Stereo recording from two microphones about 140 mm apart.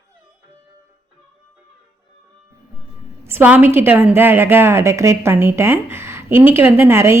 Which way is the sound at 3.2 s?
15° right (ahead or behind).